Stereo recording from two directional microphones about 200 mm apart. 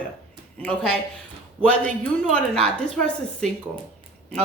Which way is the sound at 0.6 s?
5° left (ahead or behind).